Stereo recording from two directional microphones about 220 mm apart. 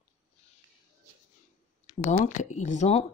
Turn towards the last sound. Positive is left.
turn(degrees=30)  # may be behind; listen again after turning